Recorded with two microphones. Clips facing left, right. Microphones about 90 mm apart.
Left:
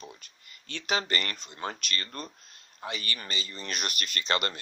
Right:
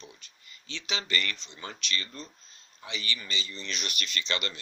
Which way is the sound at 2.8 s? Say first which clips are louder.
Left 1 dB; 45° left (ahead or behind).